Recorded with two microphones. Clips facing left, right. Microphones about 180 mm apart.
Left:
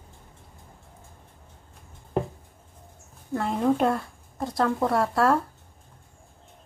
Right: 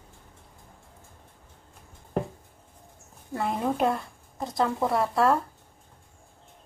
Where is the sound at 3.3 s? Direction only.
10° right (ahead or behind).